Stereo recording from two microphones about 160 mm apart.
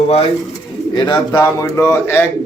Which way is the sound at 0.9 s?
30° left (ahead or behind).